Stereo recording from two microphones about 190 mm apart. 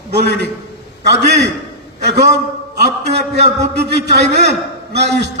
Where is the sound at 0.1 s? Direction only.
60° right (ahead or behind).